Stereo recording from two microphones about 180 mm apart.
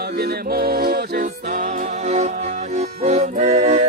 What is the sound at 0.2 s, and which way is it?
Music, 60° right (ahead or behind).